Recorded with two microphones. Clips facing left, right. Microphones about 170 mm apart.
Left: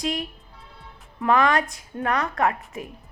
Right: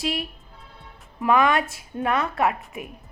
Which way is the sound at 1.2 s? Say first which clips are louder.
Even; 20° right (ahead or behind).